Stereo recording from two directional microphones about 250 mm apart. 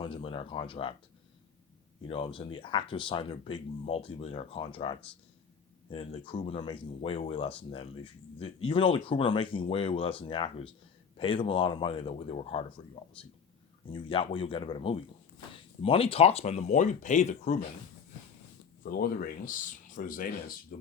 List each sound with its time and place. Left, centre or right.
0.0 s speech: left
2.0 s speech: left
13.9 s speech: left
18.9 s speech: left